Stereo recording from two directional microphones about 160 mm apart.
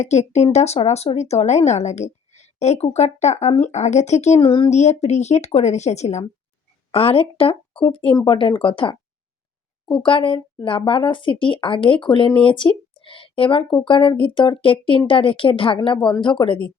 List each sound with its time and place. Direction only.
0.0 s a woman's voice: 45° left (ahead or behind); by 16.6 s 30° left (ahead or behind)